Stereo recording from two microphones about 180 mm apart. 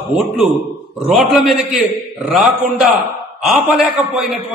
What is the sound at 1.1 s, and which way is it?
A man's voice, centre (ahead or behind).